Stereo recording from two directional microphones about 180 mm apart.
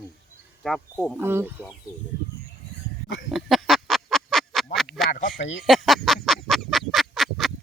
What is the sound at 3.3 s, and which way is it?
Duck, centre (ahead or behind).